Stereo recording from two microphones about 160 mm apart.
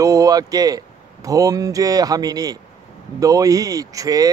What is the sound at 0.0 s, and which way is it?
Speech, 20° right (ahead or behind).